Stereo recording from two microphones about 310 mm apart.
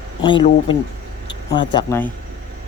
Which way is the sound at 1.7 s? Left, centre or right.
Centre.